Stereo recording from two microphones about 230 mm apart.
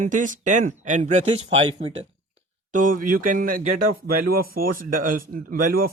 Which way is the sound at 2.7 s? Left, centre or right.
Right.